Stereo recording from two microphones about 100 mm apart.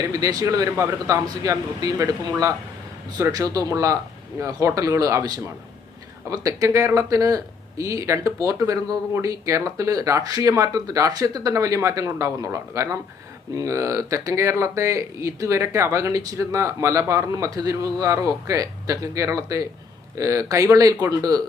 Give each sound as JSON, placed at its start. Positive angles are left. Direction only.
{"t": 0.1, "sound": "speech", "side_deg": -40}